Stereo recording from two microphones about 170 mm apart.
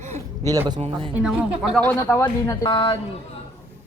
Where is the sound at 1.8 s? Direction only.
15° left (ahead or behind).